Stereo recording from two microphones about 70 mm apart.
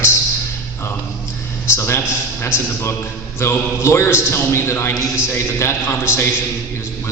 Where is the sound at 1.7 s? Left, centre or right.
Left.